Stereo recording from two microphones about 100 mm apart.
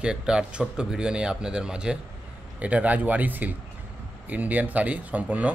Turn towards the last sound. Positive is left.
turn(degrees=-15)  # may be behind; listen again after turning